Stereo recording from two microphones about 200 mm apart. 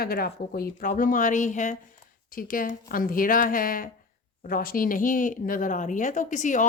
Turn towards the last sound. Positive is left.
turn(degrees=40)  # may be behind; listen again after turning